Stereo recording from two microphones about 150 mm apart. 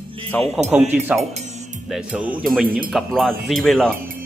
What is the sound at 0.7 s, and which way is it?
Speech, 10° right (ahead or behind).